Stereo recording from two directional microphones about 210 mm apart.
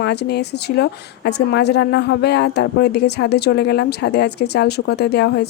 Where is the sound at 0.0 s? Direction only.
50° left (ahead or behind).